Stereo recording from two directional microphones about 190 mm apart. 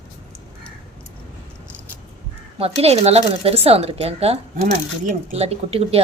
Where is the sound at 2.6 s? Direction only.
30° right (ahead or behind).